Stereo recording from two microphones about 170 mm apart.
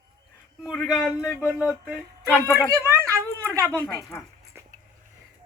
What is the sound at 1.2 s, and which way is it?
Speech, 15° left (ahead or behind).